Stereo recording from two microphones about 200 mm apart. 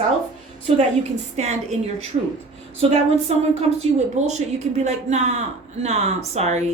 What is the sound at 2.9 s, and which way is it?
A woman's voice, 30° right (ahead or behind).